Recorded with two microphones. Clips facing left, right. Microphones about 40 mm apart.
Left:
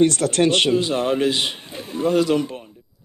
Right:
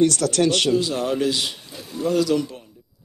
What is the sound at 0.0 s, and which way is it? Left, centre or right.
Speech, left.